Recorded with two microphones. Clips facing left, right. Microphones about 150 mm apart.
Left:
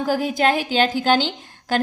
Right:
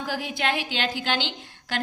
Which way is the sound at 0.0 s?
40° left (ahead or behind).